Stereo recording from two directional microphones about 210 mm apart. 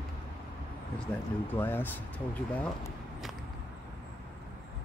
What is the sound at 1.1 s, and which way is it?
Speech, 10° left (ahead or behind).